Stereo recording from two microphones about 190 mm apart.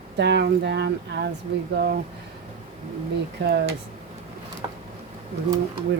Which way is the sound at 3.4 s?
70° right (ahead or behind).